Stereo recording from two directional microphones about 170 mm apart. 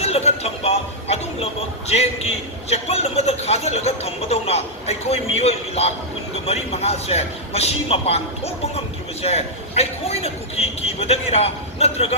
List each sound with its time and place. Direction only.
0.0 s a sound: 40° left (ahead or behind)
1.9 s speech: 40° left (ahead or behind)
9.2 s speech: 35° left (ahead or behind)